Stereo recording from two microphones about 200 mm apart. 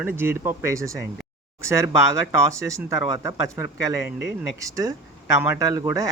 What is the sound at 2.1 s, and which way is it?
Speech, 90° left.